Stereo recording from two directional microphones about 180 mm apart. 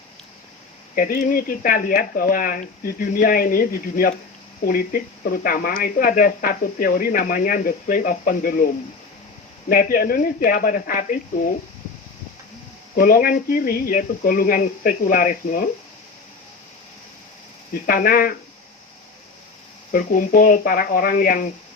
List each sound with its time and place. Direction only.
0.9 s speech: 50° left (ahead or behind)
13.0 s speech: 50° left (ahead or behind)
17.8 s speech: 55° left (ahead or behind)
19.9 s speech: 50° left (ahead or behind)